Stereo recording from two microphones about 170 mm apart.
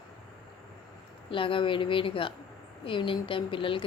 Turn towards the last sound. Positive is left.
turn(degrees=30)  # may be behind; listen again after turning